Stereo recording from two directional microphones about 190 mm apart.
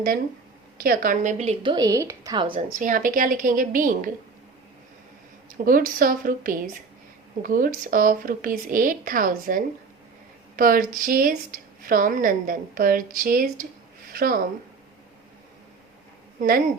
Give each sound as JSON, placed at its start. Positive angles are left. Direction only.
{"t": 0.8, "sound": "a woman's voice", "side_deg": -50}
{"t": 2.7, "sound": "speech", "side_deg": -45}
{"t": 5.6, "sound": "speech", "side_deg": -45}
{"t": 16.4, "sound": "speech", "side_deg": -50}